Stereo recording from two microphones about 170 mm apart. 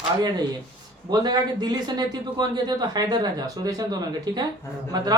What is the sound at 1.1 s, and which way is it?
Speech, 25° right (ahead or behind).